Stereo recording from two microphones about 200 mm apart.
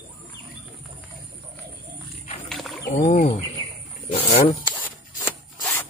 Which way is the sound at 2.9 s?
40° left (ahead or behind).